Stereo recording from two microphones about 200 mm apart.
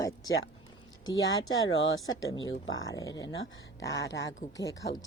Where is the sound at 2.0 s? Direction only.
20° left (ahead or behind).